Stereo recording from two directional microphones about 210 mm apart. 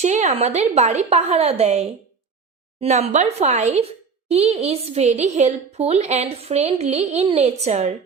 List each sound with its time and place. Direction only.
0.0 s a woman's voice: 35° right (ahead or behind)